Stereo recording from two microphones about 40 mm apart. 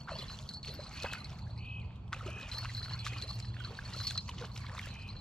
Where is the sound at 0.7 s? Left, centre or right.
Centre.